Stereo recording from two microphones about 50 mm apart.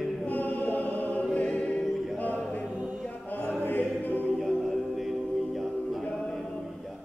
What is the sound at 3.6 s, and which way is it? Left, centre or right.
Music, left.